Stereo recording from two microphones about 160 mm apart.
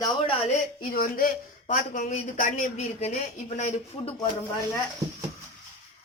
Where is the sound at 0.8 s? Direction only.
60° left (ahead or behind); by 4.1 s 45° left (ahead or behind).